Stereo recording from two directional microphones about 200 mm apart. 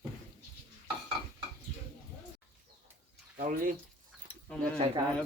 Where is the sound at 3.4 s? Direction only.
45° right (ahead or behind).